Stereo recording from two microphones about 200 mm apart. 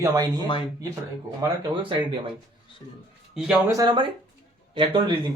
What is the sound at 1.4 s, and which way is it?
Speech, 15° right (ahead or behind).